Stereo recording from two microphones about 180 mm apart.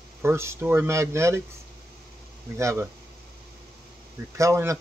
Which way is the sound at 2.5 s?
15° right (ahead or behind).